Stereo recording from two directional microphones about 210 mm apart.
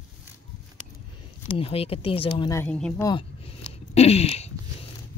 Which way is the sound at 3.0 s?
20° left (ahead or behind).